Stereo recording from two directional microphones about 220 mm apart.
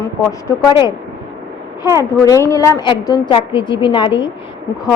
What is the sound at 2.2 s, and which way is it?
Speech, 15° left (ahead or behind).